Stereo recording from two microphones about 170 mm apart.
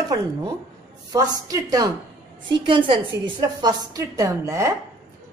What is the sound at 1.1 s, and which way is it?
A woman's voice, 20° right (ahead or behind).